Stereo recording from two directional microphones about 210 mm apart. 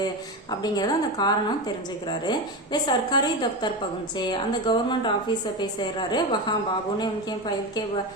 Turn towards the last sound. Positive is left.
turn(degrees=20)  # may be behind; listen again after turning